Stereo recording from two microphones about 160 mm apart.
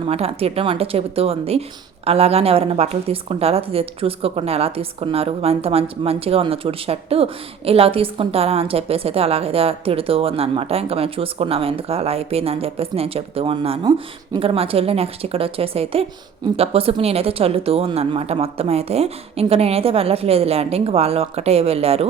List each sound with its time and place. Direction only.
0.1 s a woman's voice: 40° right (ahead or behind)